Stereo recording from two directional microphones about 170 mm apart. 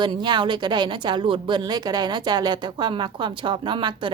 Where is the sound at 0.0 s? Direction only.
25° right (ahead or behind).